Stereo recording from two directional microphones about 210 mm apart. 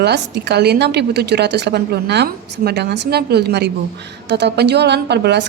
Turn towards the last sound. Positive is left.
turn(degrees=-50)  # may be behind; listen again after turning